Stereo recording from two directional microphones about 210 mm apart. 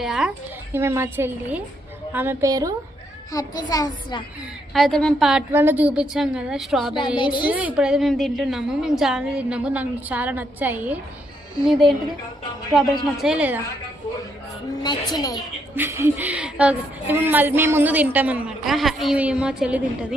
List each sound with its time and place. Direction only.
0.0 s a woman's voice: centre (ahead or behind)
3.3 s a child's voice: 20° left (ahead or behind)
4.7 s a woman's voice: centre (ahead or behind)
7.2 s a child's voice: 20° left (ahead or behind)
7.4 s a woman's voice: 5° right (ahead or behind)
13.1 s a woman's voice: 5° right (ahead or behind)
14.8 s a child's voice: 20° left (ahead or behind)
15.7 s a woman's voice: 10° right (ahead or behind)